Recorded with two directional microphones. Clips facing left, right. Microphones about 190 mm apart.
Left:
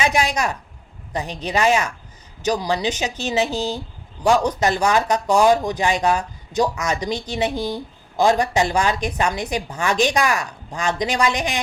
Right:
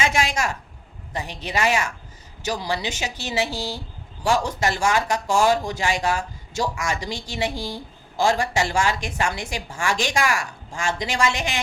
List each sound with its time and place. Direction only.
0.0 s a man's voice: 20° left (ahead or behind)